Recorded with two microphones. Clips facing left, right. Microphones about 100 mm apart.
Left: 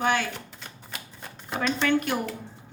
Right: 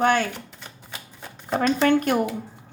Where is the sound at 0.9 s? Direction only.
5° right (ahead or behind).